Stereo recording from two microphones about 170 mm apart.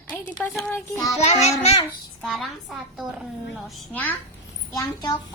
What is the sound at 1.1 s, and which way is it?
Speech, 40° left (ahead or behind).